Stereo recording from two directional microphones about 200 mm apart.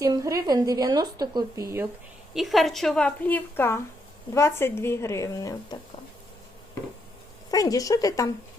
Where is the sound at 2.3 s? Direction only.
Centre (ahead or behind); by 5.8 s 20° left (ahead or behind).